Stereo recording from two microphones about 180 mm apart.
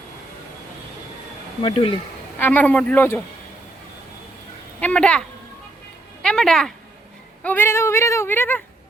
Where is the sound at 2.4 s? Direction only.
10° left (ahead or behind).